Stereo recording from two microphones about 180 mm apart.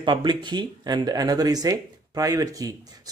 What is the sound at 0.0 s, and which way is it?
Speech, 25° right (ahead or behind).